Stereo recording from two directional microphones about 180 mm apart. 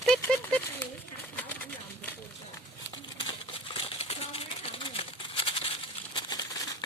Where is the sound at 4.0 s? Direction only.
35° left (ahead or behind).